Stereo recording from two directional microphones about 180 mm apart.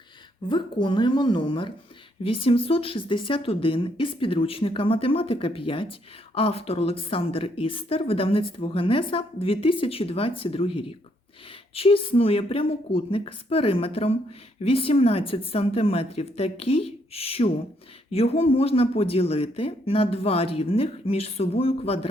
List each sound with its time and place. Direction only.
0.4 s a woman's voice: 25° left (ahead or behind)